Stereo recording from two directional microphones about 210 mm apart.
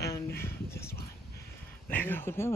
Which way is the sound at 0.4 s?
10° left (ahead or behind).